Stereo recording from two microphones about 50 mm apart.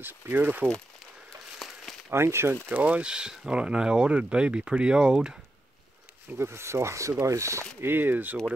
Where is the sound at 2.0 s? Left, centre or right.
Right.